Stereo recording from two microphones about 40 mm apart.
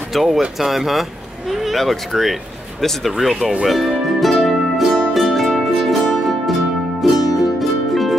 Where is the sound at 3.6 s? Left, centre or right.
Centre.